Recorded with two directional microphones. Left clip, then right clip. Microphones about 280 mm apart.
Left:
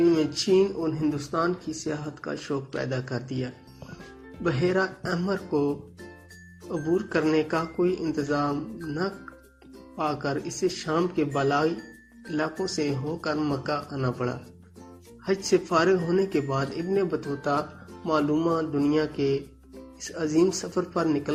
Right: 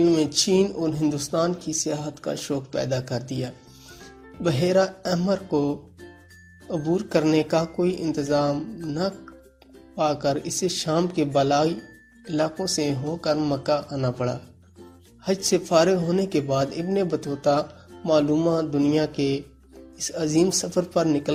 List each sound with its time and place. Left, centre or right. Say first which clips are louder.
0.0 s speech: right 3 dB; right